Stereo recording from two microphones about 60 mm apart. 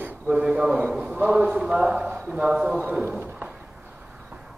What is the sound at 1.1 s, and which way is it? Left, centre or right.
A man's voice, right.